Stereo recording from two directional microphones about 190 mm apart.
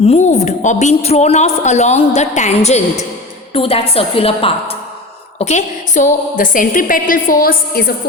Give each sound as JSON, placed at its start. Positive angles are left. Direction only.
{"t": 0.0, "sound": "a woman's voice", "side_deg": 35}